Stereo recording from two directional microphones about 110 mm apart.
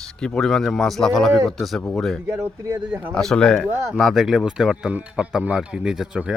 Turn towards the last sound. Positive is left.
turn(degrees=-5)  # may be behind; listen again after turning